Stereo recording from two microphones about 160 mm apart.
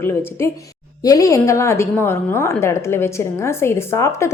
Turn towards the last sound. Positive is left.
turn(degrees=15)  # may be behind; listen again after turning